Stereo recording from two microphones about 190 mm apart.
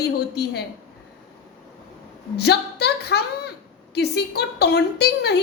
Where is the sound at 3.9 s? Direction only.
60° left (ahead or behind).